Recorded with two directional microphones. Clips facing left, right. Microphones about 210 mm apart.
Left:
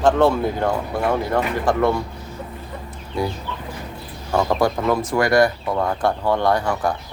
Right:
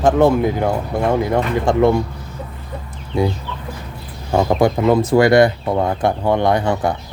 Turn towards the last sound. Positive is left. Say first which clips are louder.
# right 3 dB
turn(degrees=-25)  # may be behind; listen again after turning